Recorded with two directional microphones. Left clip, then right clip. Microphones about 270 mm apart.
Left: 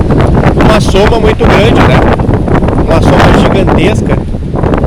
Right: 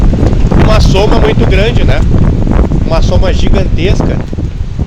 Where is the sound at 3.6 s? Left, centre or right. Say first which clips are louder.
Left 6 dB; centre.